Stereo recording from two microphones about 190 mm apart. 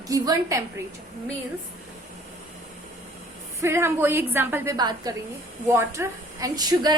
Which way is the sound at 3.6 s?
15° right (ahead or behind).